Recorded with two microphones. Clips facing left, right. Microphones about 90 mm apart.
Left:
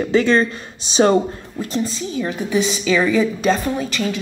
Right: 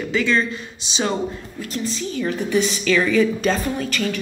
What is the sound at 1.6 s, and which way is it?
A woman's voice, 25° left (ahead or behind).